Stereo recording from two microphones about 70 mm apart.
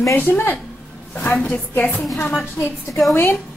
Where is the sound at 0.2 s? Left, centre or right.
Left.